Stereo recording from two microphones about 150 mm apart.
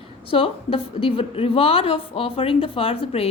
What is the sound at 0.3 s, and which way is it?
Speech, 35° left (ahead or behind).